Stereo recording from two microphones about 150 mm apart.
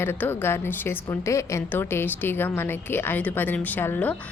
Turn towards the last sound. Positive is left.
turn(degrees=10)  # may be behind; listen again after turning